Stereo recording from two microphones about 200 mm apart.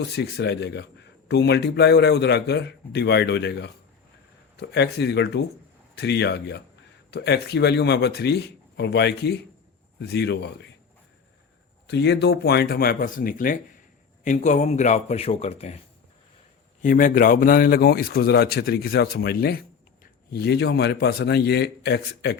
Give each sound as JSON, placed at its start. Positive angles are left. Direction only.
{"t": 0.2, "sound": "a man's voice", "side_deg": 55}
{"t": 11.9, "sound": "a man's voice", "side_deg": 60}
{"t": 16.8, "sound": "a man's voice", "side_deg": 40}